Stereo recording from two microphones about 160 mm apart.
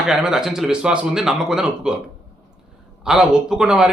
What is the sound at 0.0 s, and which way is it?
Speech, 5° right (ahead or behind).